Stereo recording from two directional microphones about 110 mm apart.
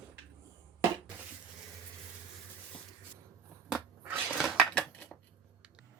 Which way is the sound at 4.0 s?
20° right (ahead or behind).